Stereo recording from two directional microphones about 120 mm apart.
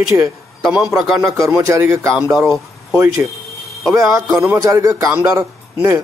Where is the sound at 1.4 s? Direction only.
25° right (ahead or behind).